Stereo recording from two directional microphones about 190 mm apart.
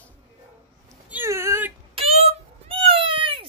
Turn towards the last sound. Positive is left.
turn(degrees=-25)  # may be behind; listen again after turning